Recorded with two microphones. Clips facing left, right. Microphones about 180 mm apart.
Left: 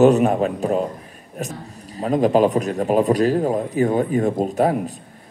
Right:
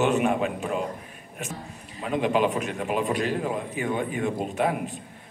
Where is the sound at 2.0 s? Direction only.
40° left (ahead or behind).